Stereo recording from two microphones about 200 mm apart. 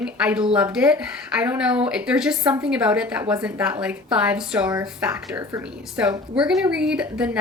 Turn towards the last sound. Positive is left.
turn(degrees=-5)  # may be behind; listen again after turning